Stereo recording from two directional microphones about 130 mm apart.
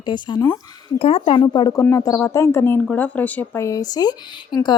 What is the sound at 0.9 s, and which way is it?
Speech, 50° left (ahead or behind).